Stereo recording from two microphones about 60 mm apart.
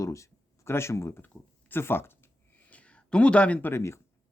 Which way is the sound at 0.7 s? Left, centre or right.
Left.